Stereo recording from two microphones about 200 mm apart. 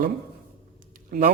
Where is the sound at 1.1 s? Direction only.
45° right (ahead or behind).